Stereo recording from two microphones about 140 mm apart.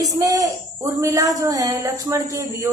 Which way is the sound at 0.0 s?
25° right (ahead or behind).